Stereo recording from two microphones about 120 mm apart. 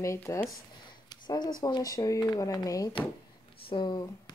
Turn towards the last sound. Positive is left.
turn(degrees=40)  # may be behind; listen again after turning